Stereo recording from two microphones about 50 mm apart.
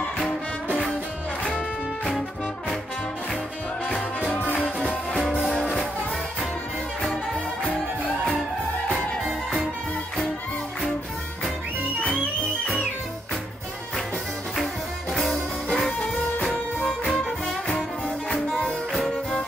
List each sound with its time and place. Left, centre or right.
4.3 s music: left
15.3 s music: centre
18.5 s music: centre